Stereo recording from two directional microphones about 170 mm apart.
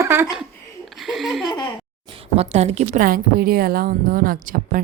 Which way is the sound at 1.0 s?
Centre (ahead or behind).